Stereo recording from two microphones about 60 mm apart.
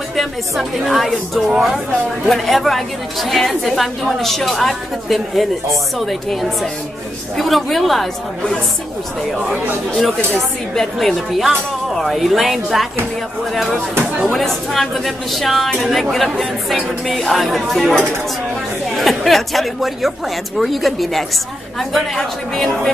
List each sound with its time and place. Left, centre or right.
0.1 s a woman's voice: centre
9.9 s a woman's voice: centre
14.2 s a woman's voice: centre
18.9 s a woman's voice: centre